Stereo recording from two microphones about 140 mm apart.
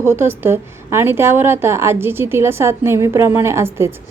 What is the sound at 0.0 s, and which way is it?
A woman's voice, 20° right (ahead or behind).